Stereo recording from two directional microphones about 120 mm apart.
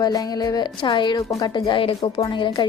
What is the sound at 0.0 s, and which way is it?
Speech, 35° left (ahead or behind).